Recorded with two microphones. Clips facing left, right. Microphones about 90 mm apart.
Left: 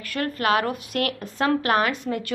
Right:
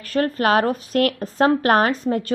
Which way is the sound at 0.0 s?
35° right (ahead or behind).